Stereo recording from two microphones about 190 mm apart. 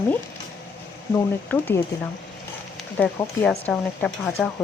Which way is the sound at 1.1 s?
10° left (ahead or behind).